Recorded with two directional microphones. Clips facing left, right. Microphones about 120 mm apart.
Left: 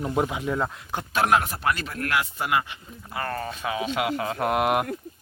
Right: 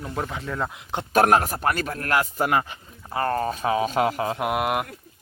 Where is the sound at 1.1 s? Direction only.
45° right (ahead or behind).